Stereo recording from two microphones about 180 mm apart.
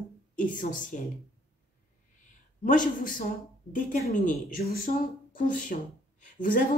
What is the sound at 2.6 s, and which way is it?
A woman's voice, 45° left (ahead or behind).